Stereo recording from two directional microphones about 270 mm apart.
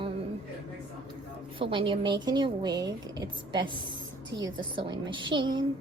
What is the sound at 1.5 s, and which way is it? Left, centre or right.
Speech, centre.